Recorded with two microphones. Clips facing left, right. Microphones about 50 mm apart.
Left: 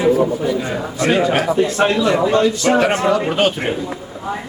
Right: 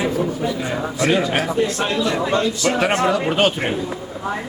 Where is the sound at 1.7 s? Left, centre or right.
Left.